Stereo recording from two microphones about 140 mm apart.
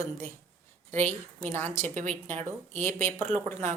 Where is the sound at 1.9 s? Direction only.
60° right (ahead or behind).